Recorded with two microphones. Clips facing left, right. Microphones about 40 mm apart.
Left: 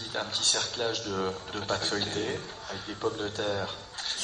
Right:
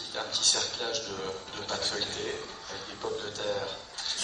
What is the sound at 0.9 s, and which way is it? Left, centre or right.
Speech, left.